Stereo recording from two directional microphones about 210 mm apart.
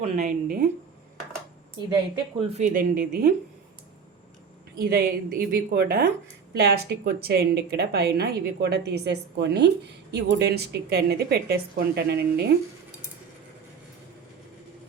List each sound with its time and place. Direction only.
0.2 s a woman's voice: 45° right (ahead or behind)
2.4 s speech: 30° right (ahead or behind)
4.8 s a woman's voice: 45° right (ahead or behind)